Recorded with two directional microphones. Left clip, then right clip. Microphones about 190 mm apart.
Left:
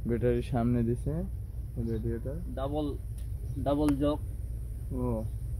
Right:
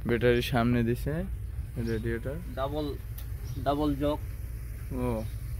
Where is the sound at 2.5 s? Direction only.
45° left (ahead or behind).